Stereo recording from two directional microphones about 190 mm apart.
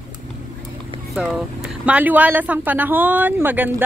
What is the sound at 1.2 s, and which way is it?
Speech, 5° right (ahead or behind).